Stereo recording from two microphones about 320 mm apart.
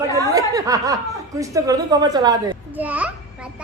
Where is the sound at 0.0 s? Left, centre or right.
Centre.